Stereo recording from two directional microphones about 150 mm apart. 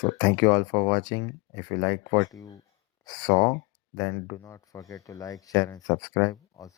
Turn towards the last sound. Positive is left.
turn(degrees=20)  # may be behind; listen again after turning